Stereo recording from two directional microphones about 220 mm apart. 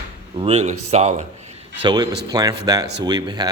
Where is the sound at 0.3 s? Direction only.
25° right (ahead or behind).